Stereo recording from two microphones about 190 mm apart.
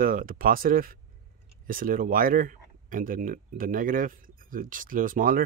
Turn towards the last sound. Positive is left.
turn(degrees=-45)  # may be behind; listen again after turning